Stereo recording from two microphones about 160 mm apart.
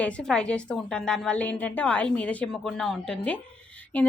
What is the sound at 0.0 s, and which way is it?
A woman's voice, 5° left (ahead or behind).